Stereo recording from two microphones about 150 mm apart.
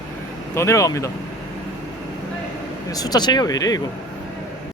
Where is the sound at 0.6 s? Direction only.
20° left (ahead or behind).